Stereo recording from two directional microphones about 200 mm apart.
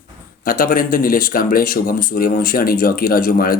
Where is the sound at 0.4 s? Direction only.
45° left (ahead or behind).